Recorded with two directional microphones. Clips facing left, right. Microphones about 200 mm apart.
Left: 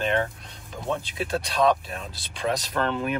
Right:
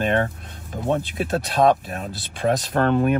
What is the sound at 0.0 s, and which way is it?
Speech, 50° right (ahead or behind).